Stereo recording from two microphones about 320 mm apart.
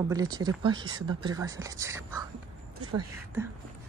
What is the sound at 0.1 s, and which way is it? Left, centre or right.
Speech, centre.